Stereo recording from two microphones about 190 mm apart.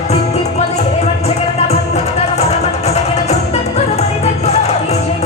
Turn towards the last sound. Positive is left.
turn(degrees=35)  # may be behind; listen again after turning